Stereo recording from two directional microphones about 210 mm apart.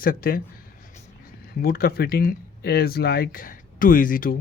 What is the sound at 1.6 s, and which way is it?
Speech, 45° left (ahead or behind).